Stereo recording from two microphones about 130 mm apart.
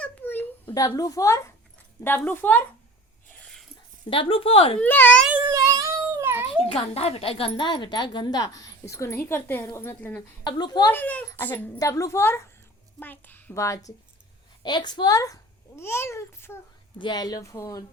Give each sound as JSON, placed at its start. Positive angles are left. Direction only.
{"t": 0.0, "sound": "a sound", "side_deg": 15}
{"t": 0.7, "sound": "a child's voice", "side_deg": 25}
{"t": 3.2, "sound": "a sound", "side_deg": 5}
{"t": 4.1, "sound": "speech", "side_deg": 45}
{"t": 4.8, "sound": "a woman's voice", "side_deg": 15}
{"t": 5.3, "sound": "cat", "side_deg": -20}
{"t": 6.7, "sound": "a woman's voice", "side_deg": 50}
{"t": 10.4, "sound": "a woman's voice", "side_deg": 30}
{"t": 10.9, "sound": "a woman's voice", "side_deg": 10}
{"t": 11.8, "sound": "a child's voice", "side_deg": 25}
{"t": 14.6, "sound": "a child's voice", "side_deg": 35}
{"t": 17.0, "sound": "a child's voice", "side_deg": 35}